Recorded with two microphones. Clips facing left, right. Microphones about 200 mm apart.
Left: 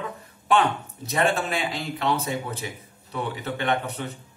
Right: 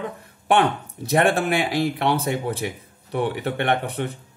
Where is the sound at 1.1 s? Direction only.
65° right (ahead or behind).